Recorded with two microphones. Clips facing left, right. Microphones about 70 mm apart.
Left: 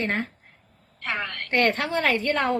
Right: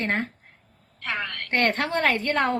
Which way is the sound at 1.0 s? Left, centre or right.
Left.